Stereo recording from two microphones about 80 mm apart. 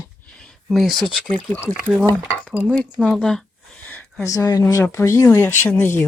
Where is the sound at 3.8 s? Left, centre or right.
Left.